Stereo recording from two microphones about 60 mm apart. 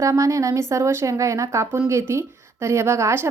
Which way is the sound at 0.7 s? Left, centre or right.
Right.